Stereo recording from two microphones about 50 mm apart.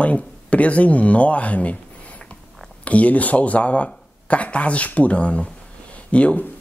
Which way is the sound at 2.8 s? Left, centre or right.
Left.